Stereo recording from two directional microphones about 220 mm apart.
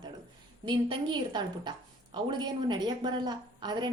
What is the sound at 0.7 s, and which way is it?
A woman's voice, 20° right (ahead or behind).